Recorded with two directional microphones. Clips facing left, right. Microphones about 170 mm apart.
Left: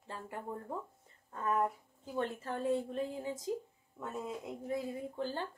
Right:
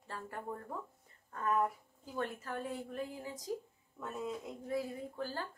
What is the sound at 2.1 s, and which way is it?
A woman's voice, 25° left (ahead or behind).